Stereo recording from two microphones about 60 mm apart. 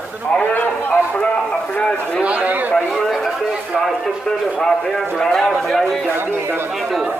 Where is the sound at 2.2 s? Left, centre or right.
Right.